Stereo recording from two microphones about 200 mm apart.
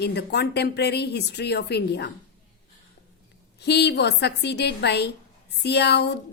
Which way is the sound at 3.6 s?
55° left (ahead or behind).